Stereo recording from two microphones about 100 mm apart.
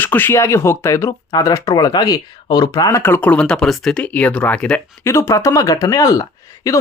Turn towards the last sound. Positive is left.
turn(degrees=35)  # may be behind; listen again after turning